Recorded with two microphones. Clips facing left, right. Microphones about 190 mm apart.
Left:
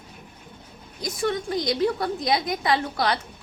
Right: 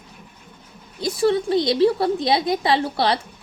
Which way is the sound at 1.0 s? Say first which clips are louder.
Right 7 dB; 30° right (ahead or behind).